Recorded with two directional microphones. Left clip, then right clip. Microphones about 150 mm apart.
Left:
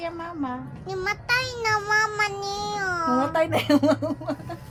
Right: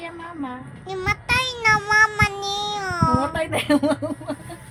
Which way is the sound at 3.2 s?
45° left (ahead or behind).